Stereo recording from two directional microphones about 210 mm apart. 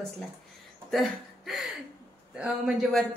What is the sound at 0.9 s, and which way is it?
A woman's voice, centre (ahead or behind).